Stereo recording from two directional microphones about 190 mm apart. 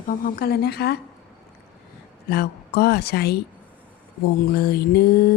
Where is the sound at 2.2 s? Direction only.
55° left (ahead or behind).